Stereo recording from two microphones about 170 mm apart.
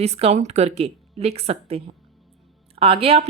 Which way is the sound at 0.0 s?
40° right (ahead or behind).